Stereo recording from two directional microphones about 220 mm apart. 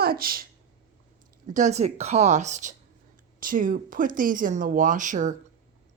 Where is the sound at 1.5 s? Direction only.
30° right (ahead or behind).